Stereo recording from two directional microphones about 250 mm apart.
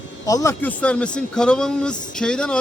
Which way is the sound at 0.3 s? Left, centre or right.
Centre.